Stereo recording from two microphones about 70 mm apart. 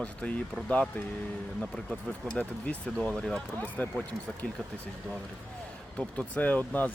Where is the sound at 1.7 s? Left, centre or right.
Centre.